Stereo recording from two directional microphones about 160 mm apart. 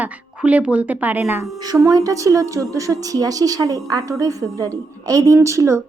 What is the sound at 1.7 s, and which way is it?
A woman's voice, 20° right (ahead or behind).